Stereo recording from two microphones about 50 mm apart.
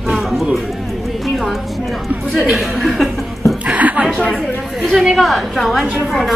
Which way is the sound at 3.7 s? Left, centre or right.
Right.